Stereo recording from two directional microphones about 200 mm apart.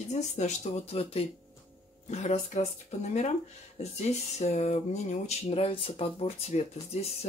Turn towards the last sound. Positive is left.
turn(degrees=30)  # may be behind; listen again after turning